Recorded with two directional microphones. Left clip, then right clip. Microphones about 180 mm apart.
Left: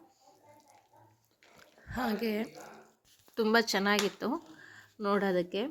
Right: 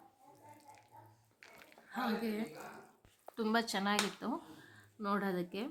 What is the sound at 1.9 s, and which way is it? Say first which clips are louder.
A woman's voice: left 5 dB; 35° left (ahead or behind).